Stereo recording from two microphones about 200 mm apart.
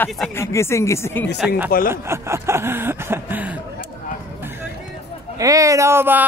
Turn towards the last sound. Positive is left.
turn(degrees=-10)  # may be behind; listen again after turning